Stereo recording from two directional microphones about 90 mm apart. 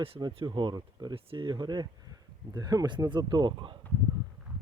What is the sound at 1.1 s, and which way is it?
Speech, 80° right.